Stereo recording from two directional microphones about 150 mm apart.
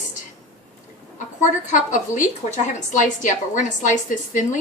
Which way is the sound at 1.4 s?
55° left (ahead or behind).